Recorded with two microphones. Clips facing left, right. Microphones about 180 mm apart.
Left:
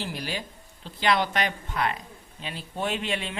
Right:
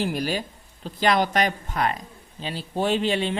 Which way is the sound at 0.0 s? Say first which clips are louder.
Right 7 dB; 45° right (ahead or behind).